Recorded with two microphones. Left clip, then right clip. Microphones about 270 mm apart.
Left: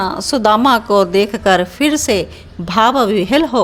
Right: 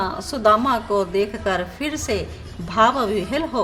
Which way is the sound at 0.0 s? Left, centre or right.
Left.